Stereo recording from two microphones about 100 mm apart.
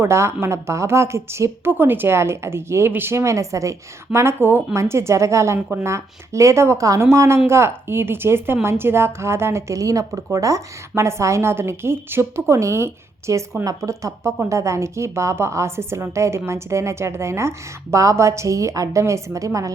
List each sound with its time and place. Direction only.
0.0 s a woman's voice: 25° right (ahead or behind)